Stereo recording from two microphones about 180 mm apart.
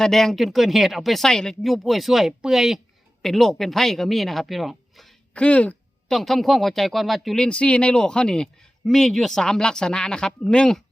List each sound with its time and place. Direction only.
0.0 s speech: centre (ahead or behind)